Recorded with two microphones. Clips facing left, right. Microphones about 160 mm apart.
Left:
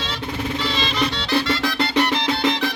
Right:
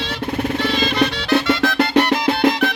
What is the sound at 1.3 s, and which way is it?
Music, 60° right (ahead or behind).